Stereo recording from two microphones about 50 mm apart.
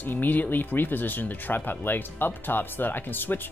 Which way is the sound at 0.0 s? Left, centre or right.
Left.